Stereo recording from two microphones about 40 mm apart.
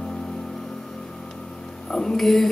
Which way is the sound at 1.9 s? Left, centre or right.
Centre.